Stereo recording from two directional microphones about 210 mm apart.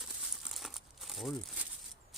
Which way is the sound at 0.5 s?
Centre (ahead or behind).